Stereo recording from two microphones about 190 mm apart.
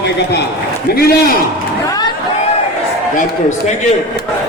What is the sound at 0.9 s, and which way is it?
Speech, 55° left (ahead or behind).